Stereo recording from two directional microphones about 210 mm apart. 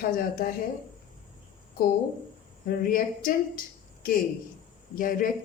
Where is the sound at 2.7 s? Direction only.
40° left (ahead or behind).